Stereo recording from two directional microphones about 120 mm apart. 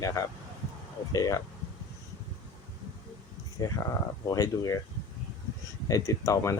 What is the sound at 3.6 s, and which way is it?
Speech, 25° left (ahead or behind).